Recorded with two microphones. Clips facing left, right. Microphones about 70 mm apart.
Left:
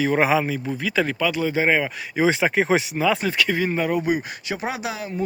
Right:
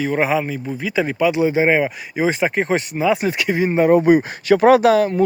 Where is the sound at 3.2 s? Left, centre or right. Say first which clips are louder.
Right 3 dB; centre.